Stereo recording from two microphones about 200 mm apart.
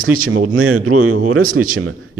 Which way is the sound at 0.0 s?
90° right.